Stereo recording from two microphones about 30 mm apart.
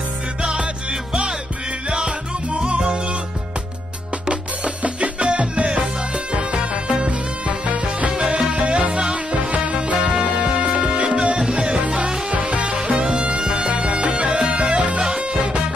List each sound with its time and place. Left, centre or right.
0.4 s music: right
1.9 s music: right
4.3 s music: right
8.3 s music: right
12.3 s music: right
13.0 s music: right
15.0 s music: right